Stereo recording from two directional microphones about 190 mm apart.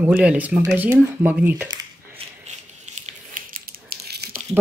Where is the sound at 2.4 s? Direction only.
35° right (ahead or behind); by 4.3 s 55° right (ahead or behind).